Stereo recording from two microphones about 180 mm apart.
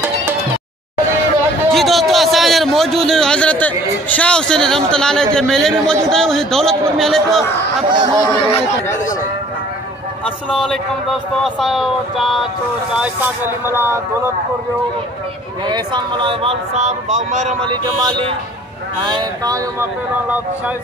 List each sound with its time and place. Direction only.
1.7 s a man's voice: centre (ahead or behind)
7.9 s speech: 25° right (ahead or behind)
10.2 s a man's voice: 5° left (ahead or behind)
13.0 s speech: 10° right (ahead or behind)
15.6 s speech: 25° right (ahead or behind); by 17.6 s 40° right (ahead or behind)
17.6 s speech: 25° right (ahead or behind); by 20.7 s 10° right (ahead or behind)